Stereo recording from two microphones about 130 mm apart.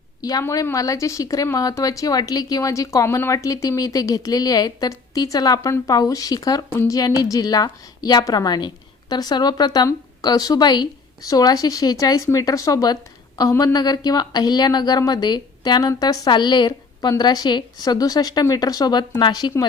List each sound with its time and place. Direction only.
0.2 s a woman's voice: 30° left (ahead or behind)